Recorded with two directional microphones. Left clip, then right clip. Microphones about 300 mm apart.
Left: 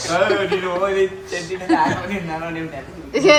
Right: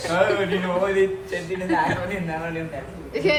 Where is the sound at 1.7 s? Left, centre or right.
Centre.